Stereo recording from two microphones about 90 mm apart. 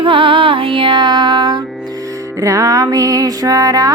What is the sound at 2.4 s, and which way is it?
Music, 40° right (ahead or behind).